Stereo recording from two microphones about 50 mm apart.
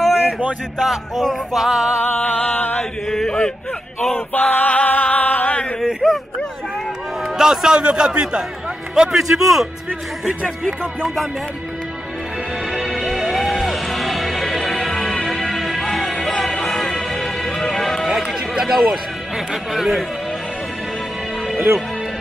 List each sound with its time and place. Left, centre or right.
0.0 s a sound: centre
0.7 s music: centre
2.1 s music: left
2.8 s chant: centre
4.3 s male singing: left
6.0 s a sound: centre
7.3 s speech: centre
8.9 s music: centre
12.7 s music: centre
18.0 s a sound: centre